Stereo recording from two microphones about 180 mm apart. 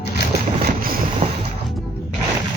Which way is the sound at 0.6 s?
55° right (ahead or behind).